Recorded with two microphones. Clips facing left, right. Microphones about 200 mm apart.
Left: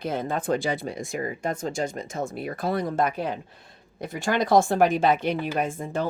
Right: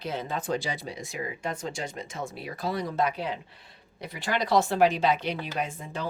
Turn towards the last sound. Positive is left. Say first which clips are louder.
# left 6 dB
turn(degrees=50)  # may be behind; listen again after turning